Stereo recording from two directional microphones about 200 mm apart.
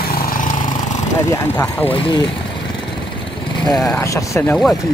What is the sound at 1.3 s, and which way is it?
Speech, 15° left (ahead or behind).